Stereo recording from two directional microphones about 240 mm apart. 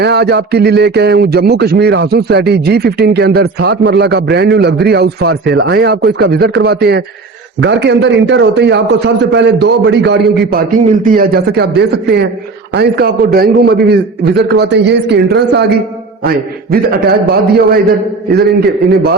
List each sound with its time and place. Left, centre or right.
0.0 s a man's voice: right
10.5 s a man's voice: right
16.7 s a man's voice: right
18.3 s a man's voice: right